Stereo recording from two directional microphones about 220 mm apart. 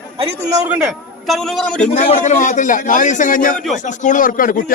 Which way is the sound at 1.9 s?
30° left (ahead or behind).